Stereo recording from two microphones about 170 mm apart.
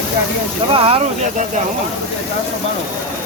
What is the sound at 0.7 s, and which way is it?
Speech, 35° right (ahead or behind).